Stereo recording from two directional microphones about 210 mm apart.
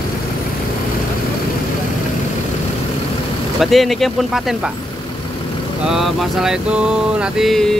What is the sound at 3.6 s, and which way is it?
Mantra, centre (ahead or behind).